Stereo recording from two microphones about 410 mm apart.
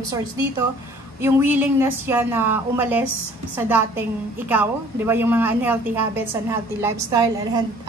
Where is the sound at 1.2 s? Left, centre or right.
Centre.